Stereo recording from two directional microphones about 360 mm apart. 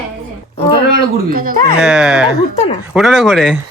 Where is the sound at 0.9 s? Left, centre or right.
Right.